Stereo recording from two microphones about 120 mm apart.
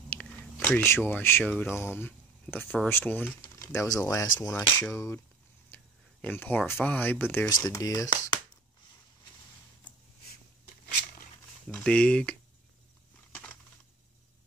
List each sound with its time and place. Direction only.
0.1 s a sound: 15° left (ahead or behind)
1.4 s speech: 15° left (ahead or behind)
3.6 s speech: 25° left (ahead or behind)
6.2 s speech: 15° left (ahead or behind)
7.4 s speech: 30° left (ahead or behind)
11.7 s speech: 10° left (ahead or behind)